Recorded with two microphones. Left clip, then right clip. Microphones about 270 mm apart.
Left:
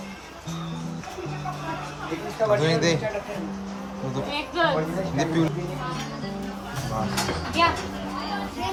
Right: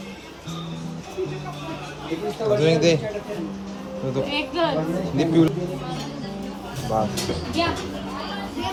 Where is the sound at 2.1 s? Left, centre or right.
Centre.